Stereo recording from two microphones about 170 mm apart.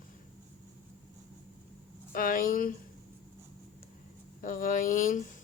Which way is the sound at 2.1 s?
55° left (ahead or behind).